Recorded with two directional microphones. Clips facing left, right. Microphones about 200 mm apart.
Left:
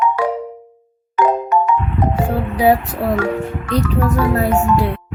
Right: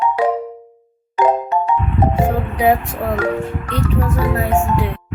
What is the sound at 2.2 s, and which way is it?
Music, 35° left (ahead or behind).